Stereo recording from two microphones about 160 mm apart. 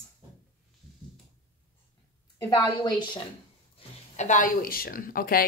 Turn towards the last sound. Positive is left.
turn(degrees=65)  # may be behind; listen again after turning